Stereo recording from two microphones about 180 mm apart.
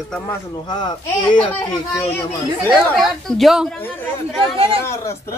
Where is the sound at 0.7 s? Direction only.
25° left (ahead or behind).